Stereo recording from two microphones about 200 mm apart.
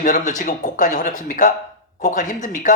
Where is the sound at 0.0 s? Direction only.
40° left (ahead or behind).